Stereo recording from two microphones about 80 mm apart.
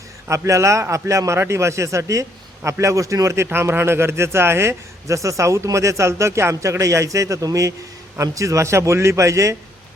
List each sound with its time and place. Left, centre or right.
0.3 s a man's voice: right